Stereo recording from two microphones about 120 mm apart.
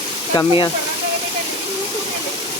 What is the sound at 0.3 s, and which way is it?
Speech, 45° left (ahead or behind).